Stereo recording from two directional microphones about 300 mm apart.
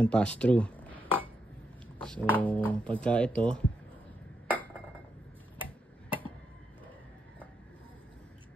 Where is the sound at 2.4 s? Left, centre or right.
Centre.